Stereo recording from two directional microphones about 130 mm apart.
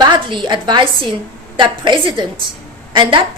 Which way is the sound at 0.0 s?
35° right (ahead or behind).